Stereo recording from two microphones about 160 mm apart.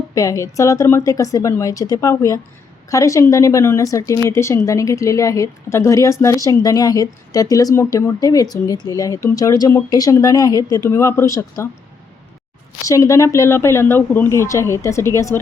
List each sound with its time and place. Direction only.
0.1 s speech: 20° left (ahead or behind)
12.8 s speech: 20° left (ahead or behind)